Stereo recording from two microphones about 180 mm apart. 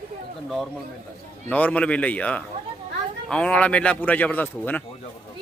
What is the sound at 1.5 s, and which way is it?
Speech, 5° left (ahead or behind).